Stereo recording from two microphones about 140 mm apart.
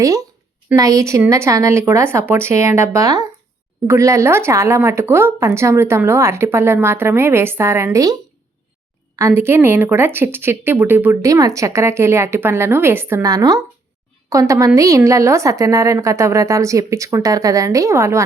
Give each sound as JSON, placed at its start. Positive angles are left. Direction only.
{"t": 0.0, "sound": "a woman's voice", "side_deg": -25}